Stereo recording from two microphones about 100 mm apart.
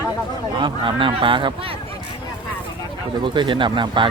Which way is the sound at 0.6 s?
55° right (ahead or behind).